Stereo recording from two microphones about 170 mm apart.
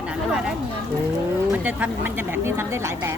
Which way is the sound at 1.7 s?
10° right (ahead or behind).